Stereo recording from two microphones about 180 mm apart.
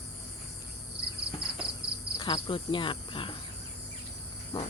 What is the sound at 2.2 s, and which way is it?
Speech, 25° left (ahead or behind).